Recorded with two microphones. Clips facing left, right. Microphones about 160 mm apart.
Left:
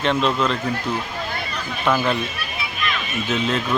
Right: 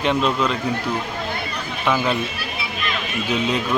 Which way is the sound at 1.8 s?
Centre (ahead or behind).